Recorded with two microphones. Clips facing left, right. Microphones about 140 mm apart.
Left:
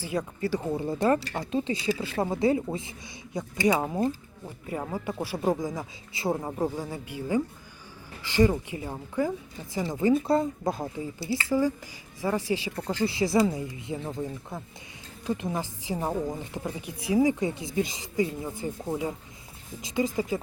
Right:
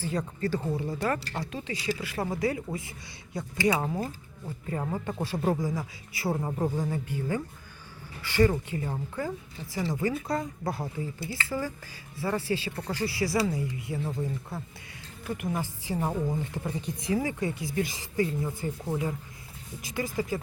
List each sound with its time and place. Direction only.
0.0 s a woman's voice: 10° left (ahead or behind)
0.7 s a woman's voice: 25° left (ahead or behind)
10.6 s a woman's voice: 20° left (ahead or behind)